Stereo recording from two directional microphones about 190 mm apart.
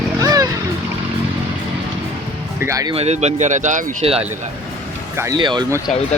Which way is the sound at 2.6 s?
15° right (ahead or behind).